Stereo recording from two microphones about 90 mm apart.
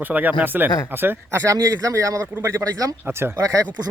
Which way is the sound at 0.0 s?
20° right (ahead or behind).